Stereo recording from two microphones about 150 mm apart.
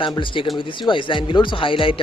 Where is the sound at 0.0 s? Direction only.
35° left (ahead or behind).